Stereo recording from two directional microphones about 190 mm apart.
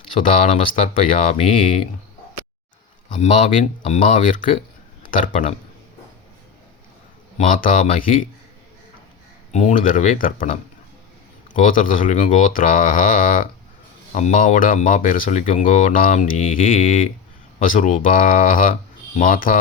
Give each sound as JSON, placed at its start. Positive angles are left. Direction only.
{"t": 0.8, "sound": "speech", "side_deg": 35}
{"t": 3.2, "sound": "speech", "side_deg": 35}
{"t": 7.3, "sound": "speech", "side_deg": 45}
{"t": 9.5, "sound": "speech", "side_deg": 40}
{"t": 11.5, "sound": "speech", "side_deg": 45}